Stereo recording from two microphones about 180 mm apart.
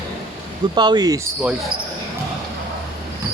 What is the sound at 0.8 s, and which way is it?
Speech, 25° right (ahead or behind).